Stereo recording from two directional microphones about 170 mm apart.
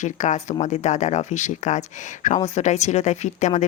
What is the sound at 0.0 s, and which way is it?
Speech, 45° left (ahead or behind).